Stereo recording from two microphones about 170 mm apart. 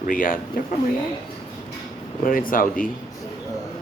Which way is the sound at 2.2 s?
55° left (ahead or behind).